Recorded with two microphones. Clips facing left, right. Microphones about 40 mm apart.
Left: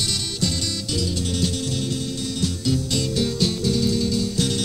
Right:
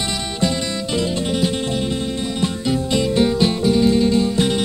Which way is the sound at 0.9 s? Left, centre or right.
Right.